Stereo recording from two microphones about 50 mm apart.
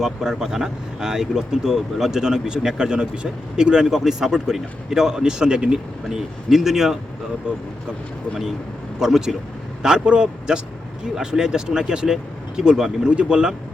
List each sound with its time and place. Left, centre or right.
0.0 s speech: centre
6.1 s speech: centre
9.0 s speech: centre